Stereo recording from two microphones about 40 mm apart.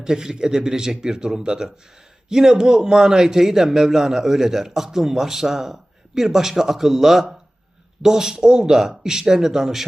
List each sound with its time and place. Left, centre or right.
0.0 s a man's voice: centre